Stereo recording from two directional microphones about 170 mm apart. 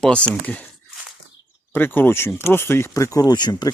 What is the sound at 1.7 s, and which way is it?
Speech, 10° left (ahead or behind).